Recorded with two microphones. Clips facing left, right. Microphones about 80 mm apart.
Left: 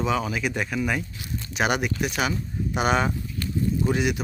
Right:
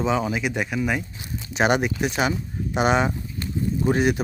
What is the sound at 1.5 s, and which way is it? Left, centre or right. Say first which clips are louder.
Speech: right 4 dB; right.